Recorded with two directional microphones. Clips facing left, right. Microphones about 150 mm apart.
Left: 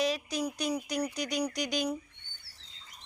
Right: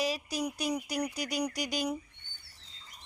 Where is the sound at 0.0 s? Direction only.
10° right (ahead or behind).